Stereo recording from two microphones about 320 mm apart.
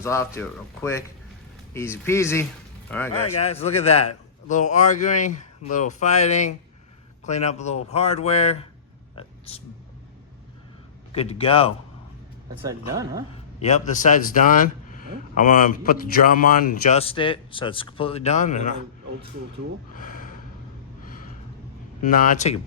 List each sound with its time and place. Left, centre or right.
0.0 s speech: centre
3.3 s a man's voice: centre
11.1 s a man's voice: centre
12.6 s speech: centre
13.6 s a man's voice: left
19.9 s a sound: left
22.0 s a man's voice: left